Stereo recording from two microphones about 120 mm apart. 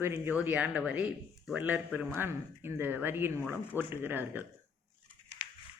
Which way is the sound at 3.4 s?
15° left (ahead or behind).